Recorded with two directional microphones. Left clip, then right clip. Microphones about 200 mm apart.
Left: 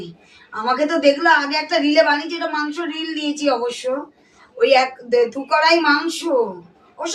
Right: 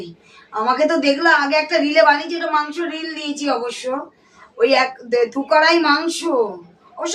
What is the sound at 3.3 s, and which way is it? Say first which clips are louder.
Speech: left 1 dB; 25° right (ahead or behind).